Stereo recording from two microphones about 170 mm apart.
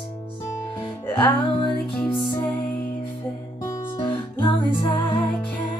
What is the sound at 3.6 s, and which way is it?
Music, 25° left (ahead or behind).